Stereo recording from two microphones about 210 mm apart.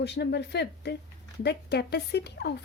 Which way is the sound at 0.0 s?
55° left (ahead or behind).